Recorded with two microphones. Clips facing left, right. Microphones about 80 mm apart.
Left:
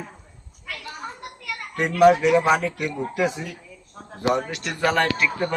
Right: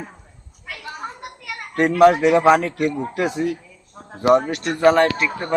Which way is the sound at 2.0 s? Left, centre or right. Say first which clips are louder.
Right 2 dB; right.